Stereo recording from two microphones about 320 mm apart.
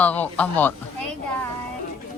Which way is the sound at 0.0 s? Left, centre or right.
Centre.